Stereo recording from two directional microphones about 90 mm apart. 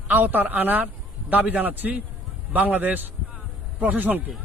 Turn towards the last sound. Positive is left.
turn(degrees=-20)  # may be behind; listen again after turning